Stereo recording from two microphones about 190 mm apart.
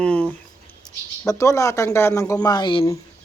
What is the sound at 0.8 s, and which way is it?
Speech, 20° left (ahead or behind).